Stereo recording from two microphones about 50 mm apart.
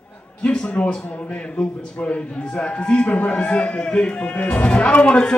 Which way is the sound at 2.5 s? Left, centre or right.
Left.